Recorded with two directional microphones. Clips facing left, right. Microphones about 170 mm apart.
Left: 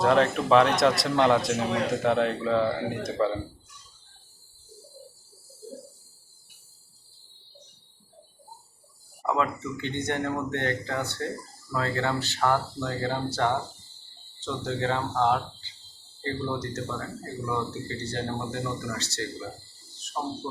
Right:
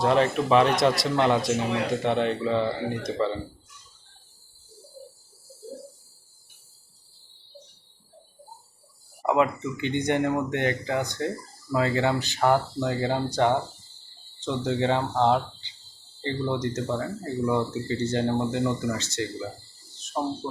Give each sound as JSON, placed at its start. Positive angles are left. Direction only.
{"t": 0.0, "sound": "a man's voice", "side_deg": 0}
{"t": 9.2, "sound": "speech", "side_deg": -15}